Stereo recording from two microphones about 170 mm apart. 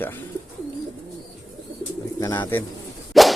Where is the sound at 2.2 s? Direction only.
15° left (ahead or behind).